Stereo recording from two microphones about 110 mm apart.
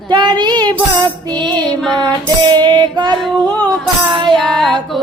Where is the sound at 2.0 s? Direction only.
45° right (ahead or behind).